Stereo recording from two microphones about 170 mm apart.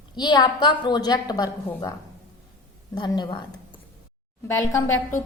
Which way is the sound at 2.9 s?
25° left (ahead or behind).